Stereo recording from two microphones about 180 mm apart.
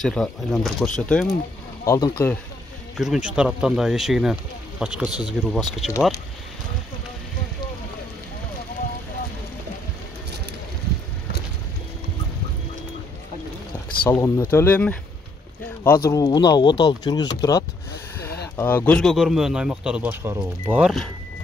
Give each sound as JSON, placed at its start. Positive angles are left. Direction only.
{"t": 0.0, "sound": "speech", "side_deg": 0}
{"t": 1.9, "sound": "speech", "side_deg": 15}
{"t": 3.0, "sound": "speech", "side_deg": -5}
{"t": 14.0, "sound": "speech", "side_deg": 15}